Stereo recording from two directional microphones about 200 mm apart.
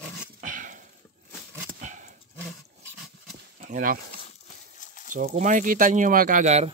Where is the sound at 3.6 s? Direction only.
40° right (ahead or behind).